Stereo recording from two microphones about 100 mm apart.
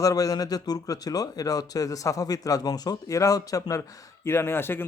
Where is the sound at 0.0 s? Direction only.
35° left (ahead or behind).